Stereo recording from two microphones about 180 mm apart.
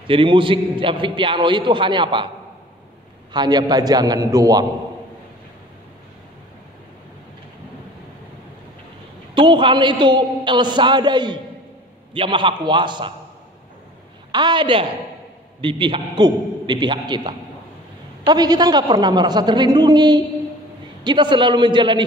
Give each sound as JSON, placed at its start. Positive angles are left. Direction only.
{"t": 0.0, "sound": "a man's voice", "side_deg": -30}
{"t": 3.3, "sound": "a man's voice", "side_deg": -20}
{"t": 9.3, "sound": "a man's voice", "side_deg": -25}
{"t": 14.3, "sound": "a man's voice", "side_deg": -25}